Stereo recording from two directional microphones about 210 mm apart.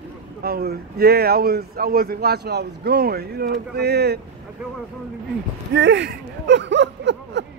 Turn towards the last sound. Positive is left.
turn(degrees=-55)  # may be behind; listen again after turning